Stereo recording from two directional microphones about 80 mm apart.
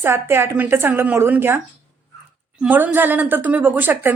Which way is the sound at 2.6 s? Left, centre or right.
Right.